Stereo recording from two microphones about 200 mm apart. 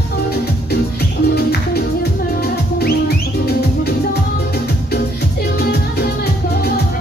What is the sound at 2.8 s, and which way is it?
Music, 50° left (ahead or behind).